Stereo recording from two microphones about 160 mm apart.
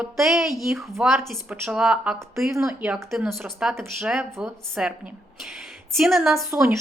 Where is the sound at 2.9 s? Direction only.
5° right (ahead or behind).